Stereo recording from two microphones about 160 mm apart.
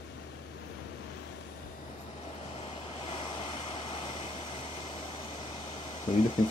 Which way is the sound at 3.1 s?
35° left (ahead or behind).